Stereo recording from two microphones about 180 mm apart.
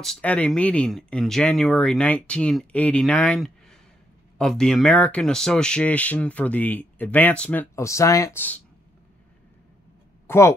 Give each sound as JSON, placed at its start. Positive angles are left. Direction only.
{"t": 0.0, "sound": "speech", "side_deg": 5}
{"t": 10.2, "sound": "speech", "side_deg": 15}